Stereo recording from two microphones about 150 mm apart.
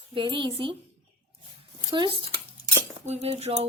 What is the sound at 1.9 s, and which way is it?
Speech, 35° right (ahead or behind).